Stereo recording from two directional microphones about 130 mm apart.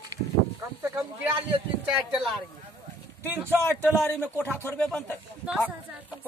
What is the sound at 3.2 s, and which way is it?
Speech, 15° right (ahead or behind).